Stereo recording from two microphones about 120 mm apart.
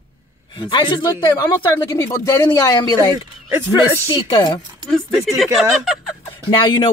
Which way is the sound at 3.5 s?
20° right (ahead or behind).